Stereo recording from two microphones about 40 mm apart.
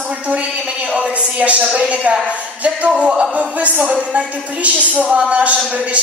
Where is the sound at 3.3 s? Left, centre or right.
Right.